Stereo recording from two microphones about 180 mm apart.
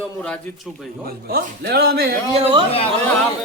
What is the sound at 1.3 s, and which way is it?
Speech, 60° right (ahead or behind).